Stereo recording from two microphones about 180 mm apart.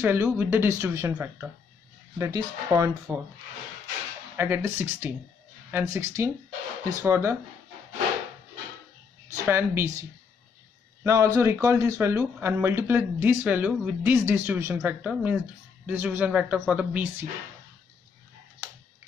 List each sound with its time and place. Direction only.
0.0 s speech: 10° right (ahead or behind)
4.4 s speech: 15° right (ahead or behind)
9.3 s speech: 15° right (ahead or behind)
11.1 s speech: 20° right (ahead or behind)